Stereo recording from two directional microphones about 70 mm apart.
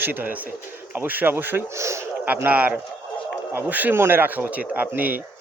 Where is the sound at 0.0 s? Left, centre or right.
Right.